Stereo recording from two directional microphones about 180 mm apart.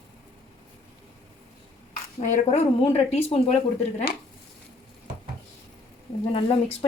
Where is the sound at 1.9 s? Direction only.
45° left (ahead or behind).